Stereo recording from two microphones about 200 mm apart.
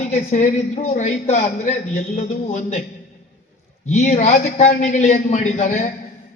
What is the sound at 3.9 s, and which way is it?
A man's voice, 35° left (ahead or behind).